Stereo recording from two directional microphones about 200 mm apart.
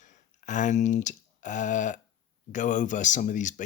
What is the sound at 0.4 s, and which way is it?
Speech, 40° left (ahead or behind).